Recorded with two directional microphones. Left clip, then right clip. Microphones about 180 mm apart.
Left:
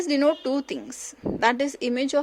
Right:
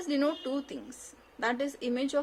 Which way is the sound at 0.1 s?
35° left (ahead or behind).